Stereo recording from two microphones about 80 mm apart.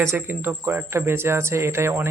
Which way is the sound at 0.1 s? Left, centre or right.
Right.